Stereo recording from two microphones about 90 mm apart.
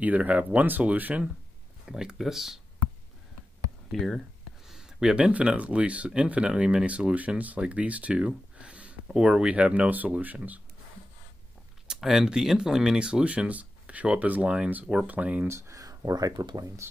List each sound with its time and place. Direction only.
0.0 s speech: 15° right (ahead or behind)
1.9 s speech: 5° right (ahead or behind)
3.9 s speech: 5° left (ahead or behind); by 10.6 s 20° right (ahead or behind)
11.9 s speech: 5° right (ahead or behind)
15.4 s speech: 30° right (ahead or behind)